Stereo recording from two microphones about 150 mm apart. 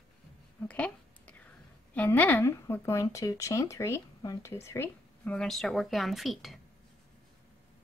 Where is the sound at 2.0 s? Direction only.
10° left (ahead or behind).